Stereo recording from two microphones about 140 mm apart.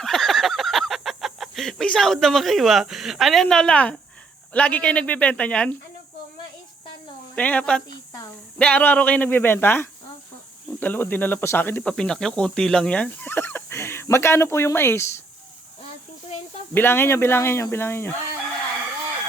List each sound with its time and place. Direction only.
0.0 s a sound: centre (ahead or behind)
4.5 s speech: 10° left (ahead or behind)
7.3 s speech: 10° left (ahead or behind)
7.9 s a sound: 25° left (ahead or behind)
8.5 s speech: 10° left (ahead or behind)
16.7 s speech: 15° left (ahead or behind)